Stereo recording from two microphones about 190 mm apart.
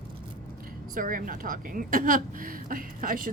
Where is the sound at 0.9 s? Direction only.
45° right (ahead or behind).